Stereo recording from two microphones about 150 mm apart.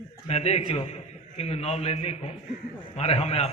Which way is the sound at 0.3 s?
45° left (ahead or behind).